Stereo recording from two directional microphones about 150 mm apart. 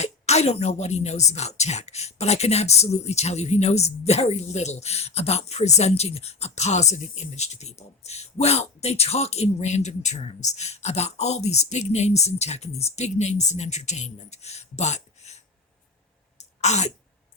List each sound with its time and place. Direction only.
0.0 s a woman's voice: 45° left (ahead or behind)
16.4 s throat clearing: 50° left (ahead or behind)